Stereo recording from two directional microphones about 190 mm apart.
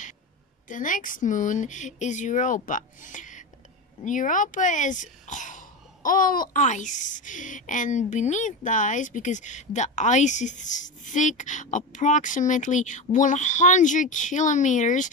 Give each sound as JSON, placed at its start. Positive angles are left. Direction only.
{"t": 0.7, "sound": "speech", "side_deg": 45}